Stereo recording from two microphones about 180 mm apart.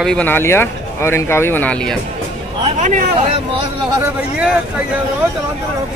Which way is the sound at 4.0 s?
5° right (ahead or behind).